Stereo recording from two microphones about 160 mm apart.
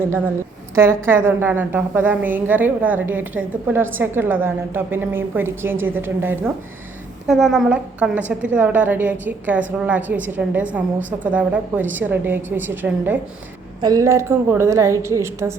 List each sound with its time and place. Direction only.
0.8 s a woman's voice: 15° right (ahead or behind)
7.3 s a woman's voice: centre (ahead or behind); by 15.5 s 15° right (ahead or behind)